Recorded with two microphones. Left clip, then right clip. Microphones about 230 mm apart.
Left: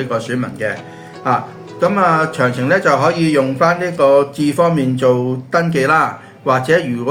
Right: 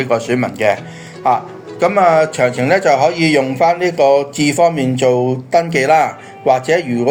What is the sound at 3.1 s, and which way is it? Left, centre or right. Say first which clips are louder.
A man's voice: right 1 dB; centre.